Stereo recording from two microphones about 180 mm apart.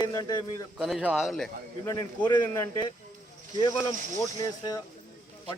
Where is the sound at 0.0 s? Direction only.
20° left (ahead or behind).